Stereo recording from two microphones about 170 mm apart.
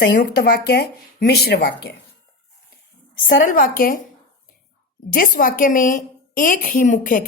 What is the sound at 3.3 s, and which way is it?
Speech, 55° left (ahead or behind).